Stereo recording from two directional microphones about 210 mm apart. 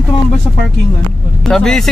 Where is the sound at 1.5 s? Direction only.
Centre (ahead or behind).